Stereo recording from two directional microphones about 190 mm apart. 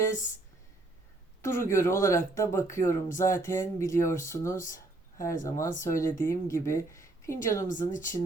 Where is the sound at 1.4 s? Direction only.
15° left (ahead or behind).